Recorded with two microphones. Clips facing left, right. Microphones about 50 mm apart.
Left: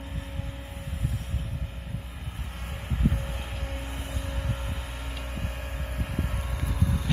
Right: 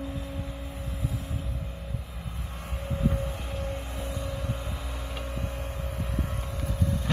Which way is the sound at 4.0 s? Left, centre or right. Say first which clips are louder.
Right 3 dB; left.